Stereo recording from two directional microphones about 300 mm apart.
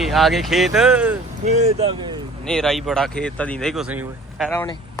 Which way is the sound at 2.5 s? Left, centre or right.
Centre.